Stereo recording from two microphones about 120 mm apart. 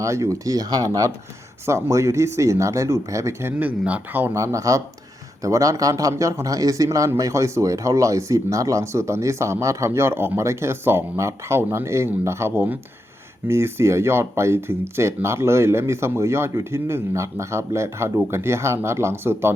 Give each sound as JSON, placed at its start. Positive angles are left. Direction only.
{"t": 0.0, "sound": "speech", "side_deg": -25}
{"t": 3.8, "sound": "speech", "side_deg": -15}